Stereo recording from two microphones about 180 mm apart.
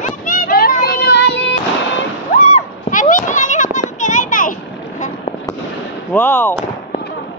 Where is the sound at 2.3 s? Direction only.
45° left (ahead or behind).